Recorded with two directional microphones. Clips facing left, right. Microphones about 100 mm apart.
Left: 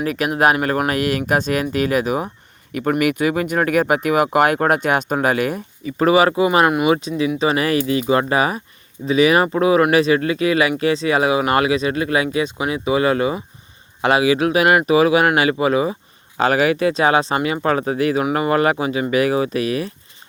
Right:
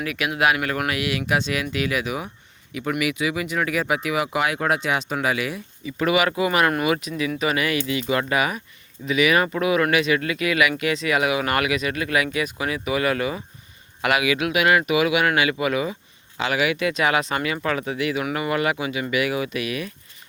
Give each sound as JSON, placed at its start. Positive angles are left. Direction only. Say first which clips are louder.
{"t": 0.0, "sound": "speech", "louder": "left 5 dB", "side_deg": 40}
{"t": 16.4, "sound": "speech", "louder": "left 6 dB", "side_deg": 40}